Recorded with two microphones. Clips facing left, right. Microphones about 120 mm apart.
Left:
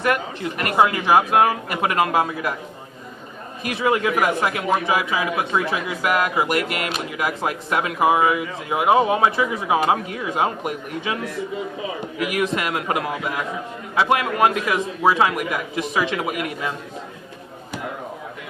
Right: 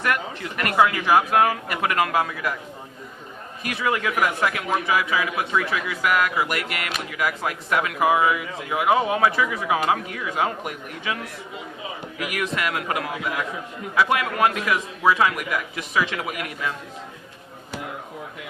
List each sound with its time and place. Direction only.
0.0 s speech: 25° left (ahead or behind)
3.6 s speech: 25° left (ahead or behind)
12.3 s speech: 25° left (ahead or behind)